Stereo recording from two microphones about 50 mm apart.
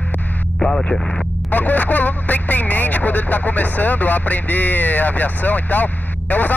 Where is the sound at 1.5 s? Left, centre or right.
Left.